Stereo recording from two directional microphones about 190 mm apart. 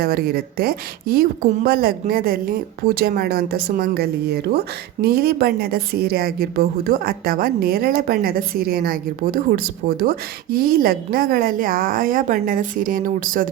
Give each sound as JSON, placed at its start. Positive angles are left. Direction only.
{"t": 0.0, "sound": "a woman's voice", "side_deg": -55}